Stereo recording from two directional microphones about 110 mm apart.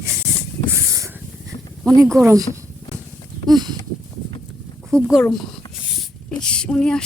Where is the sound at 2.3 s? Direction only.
35° right (ahead or behind).